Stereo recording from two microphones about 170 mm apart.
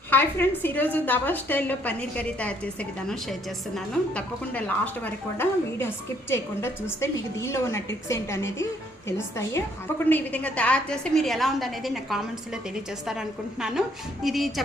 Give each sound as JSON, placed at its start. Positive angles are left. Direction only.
{"t": 0.1, "sound": "a woman's voice", "side_deg": 10}
{"t": 4.1, "sound": "a woman's voice", "side_deg": 10}